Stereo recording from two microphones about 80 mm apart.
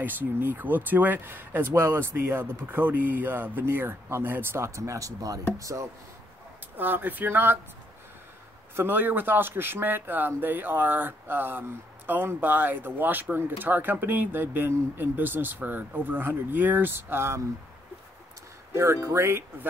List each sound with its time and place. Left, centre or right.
0.0 s speech: right
6.8 s speech: right
8.7 s speech: right
19.0 s speech: right